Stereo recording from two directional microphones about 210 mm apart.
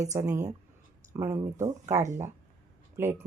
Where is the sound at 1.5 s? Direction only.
15° right (ahead or behind).